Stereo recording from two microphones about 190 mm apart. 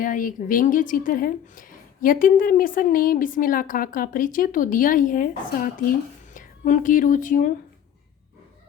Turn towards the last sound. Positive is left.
turn(degrees=45)  # may be behind; listen again after turning